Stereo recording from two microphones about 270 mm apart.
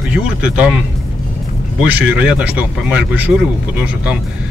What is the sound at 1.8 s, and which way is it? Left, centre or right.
Speech, centre.